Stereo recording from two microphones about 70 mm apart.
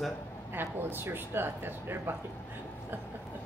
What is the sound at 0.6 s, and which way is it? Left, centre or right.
Speech, right.